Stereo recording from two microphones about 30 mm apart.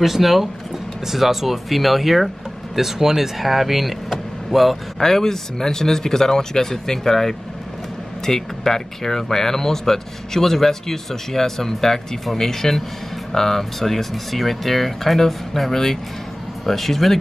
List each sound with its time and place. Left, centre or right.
0.0 s speech: centre
4.9 s speech: centre